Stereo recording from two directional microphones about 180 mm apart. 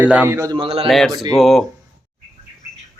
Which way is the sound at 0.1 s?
10° right (ahead or behind).